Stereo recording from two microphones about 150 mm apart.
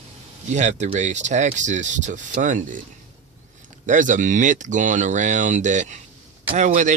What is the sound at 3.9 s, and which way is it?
Speech, 60° right (ahead or behind).